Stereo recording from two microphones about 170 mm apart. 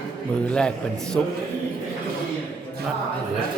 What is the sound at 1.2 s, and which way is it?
Speech, 10° left (ahead or behind).